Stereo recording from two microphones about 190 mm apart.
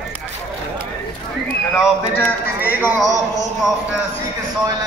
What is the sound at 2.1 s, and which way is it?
A man's voice, 10° left (ahead or behind).